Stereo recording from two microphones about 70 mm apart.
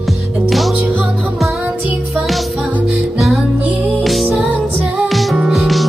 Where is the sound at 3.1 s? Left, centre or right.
Centre.